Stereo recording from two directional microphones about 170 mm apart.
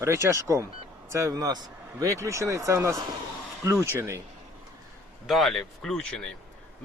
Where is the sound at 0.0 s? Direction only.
15° right (ahead or behind).